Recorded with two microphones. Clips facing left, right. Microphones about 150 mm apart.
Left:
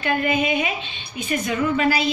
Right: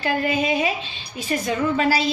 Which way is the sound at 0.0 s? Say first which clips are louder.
Even; 35° right (ahead or behind).